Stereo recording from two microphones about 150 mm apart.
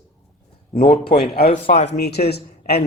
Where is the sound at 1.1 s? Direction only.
90° left.